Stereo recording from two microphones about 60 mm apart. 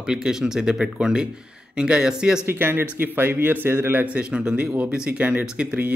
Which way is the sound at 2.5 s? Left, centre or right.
Right.